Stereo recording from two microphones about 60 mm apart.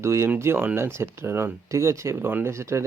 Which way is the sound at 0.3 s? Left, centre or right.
Right.